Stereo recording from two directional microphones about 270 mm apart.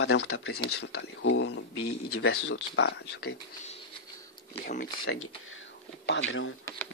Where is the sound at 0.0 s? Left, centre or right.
Left.